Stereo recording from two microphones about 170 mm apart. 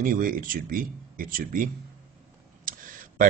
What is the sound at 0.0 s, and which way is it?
Speech, 55° right (ahead or behind).